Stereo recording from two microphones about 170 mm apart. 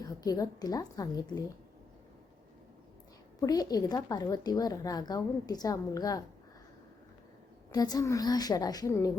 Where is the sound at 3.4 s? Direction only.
20° left (ahead or behind).